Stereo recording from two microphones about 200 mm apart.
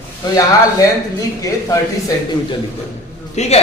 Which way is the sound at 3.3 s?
35° left (ahead or behind).